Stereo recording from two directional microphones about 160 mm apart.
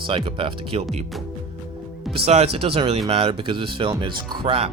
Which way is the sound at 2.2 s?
40° right (ahead or behind).